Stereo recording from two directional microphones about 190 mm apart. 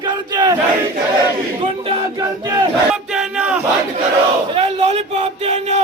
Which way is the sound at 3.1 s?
5° right (ahead or behind).